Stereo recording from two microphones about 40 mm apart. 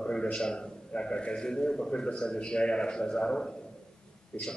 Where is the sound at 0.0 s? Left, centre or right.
Left.